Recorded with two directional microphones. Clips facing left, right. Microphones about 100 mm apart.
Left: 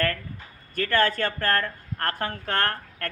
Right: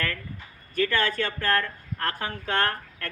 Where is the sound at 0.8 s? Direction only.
50° left (ahead or behind).